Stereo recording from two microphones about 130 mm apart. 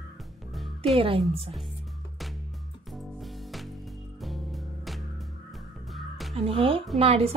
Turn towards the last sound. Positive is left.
turn(degrees=-50)  # may be behind; listen again after turning